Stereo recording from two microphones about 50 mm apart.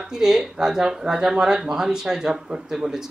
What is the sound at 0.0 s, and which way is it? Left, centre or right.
Speech, centre.